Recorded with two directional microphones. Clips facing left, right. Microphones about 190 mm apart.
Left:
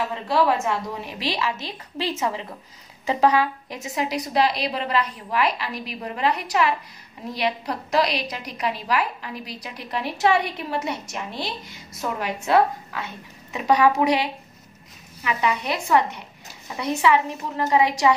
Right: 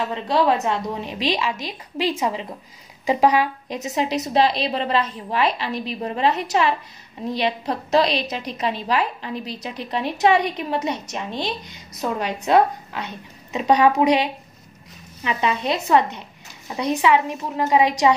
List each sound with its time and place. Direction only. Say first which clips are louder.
0.1 s a woman's voice: right 3 dB; 20° right (ahead or behind)